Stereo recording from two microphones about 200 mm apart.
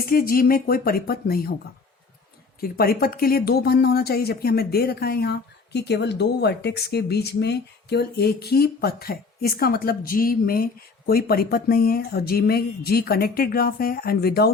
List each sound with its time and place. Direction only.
0.0 s speech: 45° left (ahead or behind)
2.6 s speech: 50° left (ahead or behind)